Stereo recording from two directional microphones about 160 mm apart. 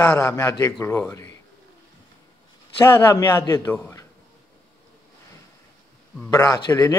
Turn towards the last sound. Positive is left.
turn(degrees=25)  # may be behind; listen again after turning